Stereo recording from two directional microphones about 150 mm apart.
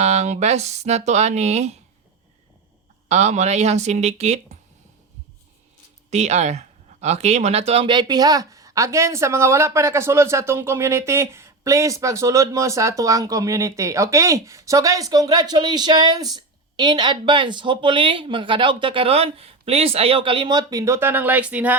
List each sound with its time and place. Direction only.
0.0 s speech: 45° right (ahead or behind)
3.1 s speech: 50° right (ahead or behind)
6.1 s speech: 45° right (ahead or behind); by 21.8 s 10° right (ahead or behind)